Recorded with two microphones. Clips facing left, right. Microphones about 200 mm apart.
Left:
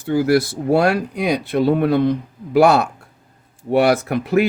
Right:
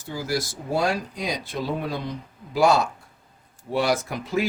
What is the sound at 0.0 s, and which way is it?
Speech, 65° left (ahead or behind).